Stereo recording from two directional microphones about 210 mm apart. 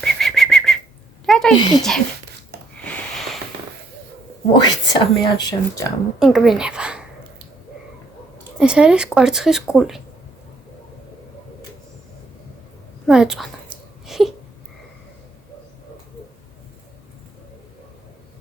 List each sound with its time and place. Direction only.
0.0 s whistling: centre (ahead or behind)
1.3 s a woman's voice: centre (ahead or behind)
2.7 s a sound: 5° left (ahead or behind)
4.5 s speech: 20° left (ahead or behind)
6.1 s a woman's voice: centre (ahead or behind)
8.5 s speech: 5° right (ahead or behind)
13.1 s speech: centre (ahead or behind)
14.1 s a sound: centre (ahead or behind)